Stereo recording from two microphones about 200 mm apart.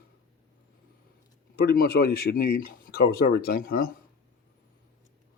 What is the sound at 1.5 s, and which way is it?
Speech, 50° left (ahead or behind).